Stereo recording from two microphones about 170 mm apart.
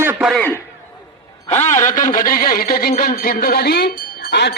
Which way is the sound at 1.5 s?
45° left (ahead or behind).